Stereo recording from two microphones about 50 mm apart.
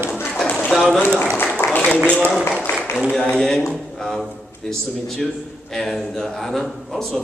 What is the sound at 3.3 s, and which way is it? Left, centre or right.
Speech, centre.